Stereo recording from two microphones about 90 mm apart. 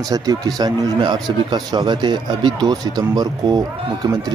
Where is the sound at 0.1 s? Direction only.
45° right (ahead or behind).